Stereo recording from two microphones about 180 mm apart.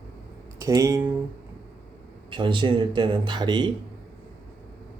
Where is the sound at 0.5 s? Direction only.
20° right (ahead or behind).